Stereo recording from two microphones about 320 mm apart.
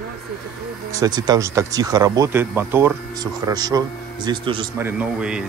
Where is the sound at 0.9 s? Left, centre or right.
Centre.